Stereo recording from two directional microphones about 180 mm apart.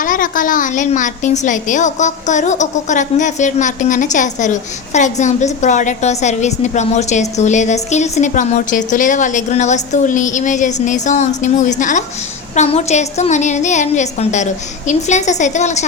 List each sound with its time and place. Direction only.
0.0 s a woman's voice: 50° left (ahead or behind)